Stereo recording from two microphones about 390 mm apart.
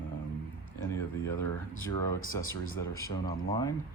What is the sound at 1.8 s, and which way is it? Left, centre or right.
Speech, left.